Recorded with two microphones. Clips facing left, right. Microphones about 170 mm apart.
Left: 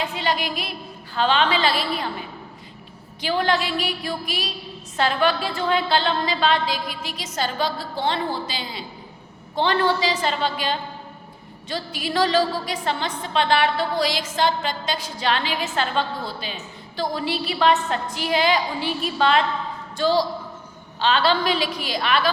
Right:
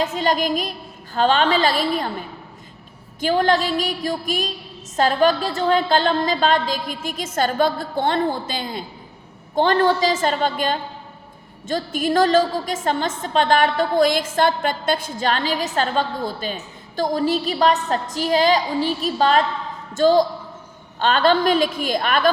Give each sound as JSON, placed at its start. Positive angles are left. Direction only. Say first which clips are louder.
{"t": 0.0, "sound": "a woman's voice", "louder": "right 5 dB", "side_deg": -45}
{"t": 3.2, "sound": "a woman's voice", "louder": "right 4 dB", "side_deg": -45}